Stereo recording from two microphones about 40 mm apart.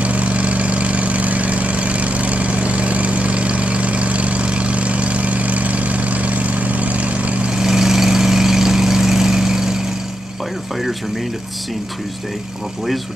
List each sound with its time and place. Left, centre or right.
0.0 s vehicle: right
7.5 s vehicle: centre